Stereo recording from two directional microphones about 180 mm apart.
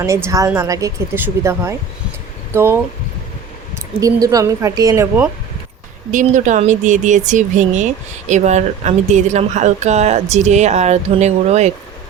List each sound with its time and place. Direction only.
0.0 s speech: 15° right (ahead or behind)
4.0 s a woman's voice: 20° right (ahead or behind)
6.1 s speech: 45° right (ahead or behind)